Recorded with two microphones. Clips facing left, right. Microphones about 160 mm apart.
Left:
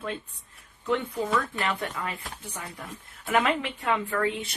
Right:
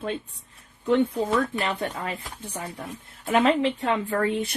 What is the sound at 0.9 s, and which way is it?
Speech, 30° right (ahead or behind).